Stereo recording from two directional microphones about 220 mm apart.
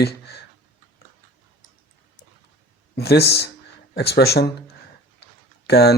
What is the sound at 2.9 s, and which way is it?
Speech, 45° left (ahead or behind).